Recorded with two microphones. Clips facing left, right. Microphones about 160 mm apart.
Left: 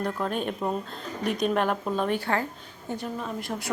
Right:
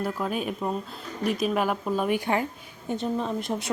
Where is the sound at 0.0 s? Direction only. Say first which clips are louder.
Even; 5° right (ahead or behind).